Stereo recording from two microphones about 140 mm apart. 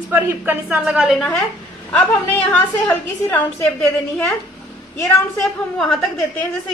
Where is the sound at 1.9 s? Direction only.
10° left (ahead or behind).